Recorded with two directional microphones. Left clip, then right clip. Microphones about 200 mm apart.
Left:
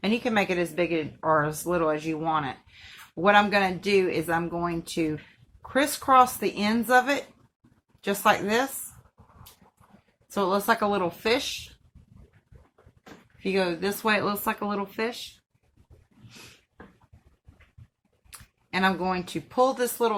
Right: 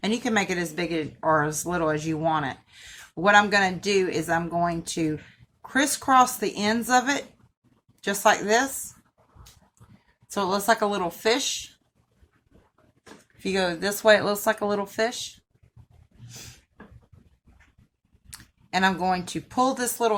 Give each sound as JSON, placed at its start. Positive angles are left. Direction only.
{"t": 0.0, "sound": "a woman's voice", "side_deg": -45}
{"t": 10.3, "sound": "a woman's voice", "side_deg": -45}
{"t": 13.4, "sound": "a woman's voice", "side_deg": -45}
{"t": 18.3, "sound": "speech", "side_deg": -45}